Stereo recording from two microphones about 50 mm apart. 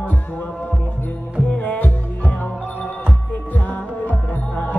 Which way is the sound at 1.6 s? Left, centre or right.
Left.